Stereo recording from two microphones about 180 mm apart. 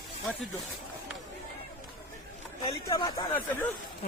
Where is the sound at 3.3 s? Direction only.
10° left (ahead or behind).